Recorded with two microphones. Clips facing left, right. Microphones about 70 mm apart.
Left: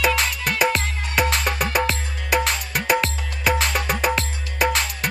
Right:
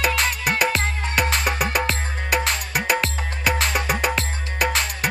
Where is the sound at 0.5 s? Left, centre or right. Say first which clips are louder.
Even; centre.